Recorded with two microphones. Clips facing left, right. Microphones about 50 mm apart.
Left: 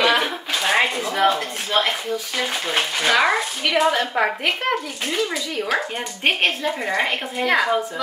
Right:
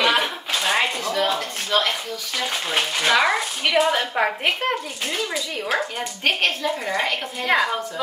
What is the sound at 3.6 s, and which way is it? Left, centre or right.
Speech, centre.